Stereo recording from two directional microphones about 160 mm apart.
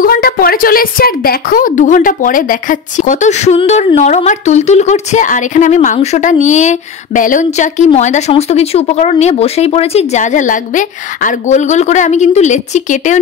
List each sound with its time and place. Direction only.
0.0 s speech: 65° left (ahead or behind); by 13.2 s 50° left (ahead or behind)